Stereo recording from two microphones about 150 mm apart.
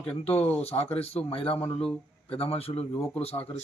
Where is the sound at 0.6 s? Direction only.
45° left (ahead or behind).